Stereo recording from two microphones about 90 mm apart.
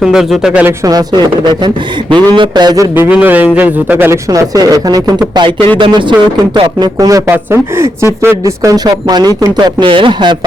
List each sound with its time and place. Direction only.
0.0 s speech: 5° right (ahead or behind)
0.9 s speech: 50° right (ahead or behind)
2.9 s speech: 20° right (ahead or behind)
4.3 s speech: 45° right (ahead or behind)
5.3 s speech: 65° right (ahead or behind); by 7.2 s 50° right (ahead or behind)
7.3 s speech: 30° right (ahead or behind); by 9.7 s 50° right (ahead or behind)
9.8 s speech: 65° right (ahead or behind)